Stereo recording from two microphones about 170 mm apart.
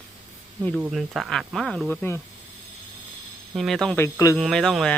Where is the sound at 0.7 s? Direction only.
Centre (ahead or behind).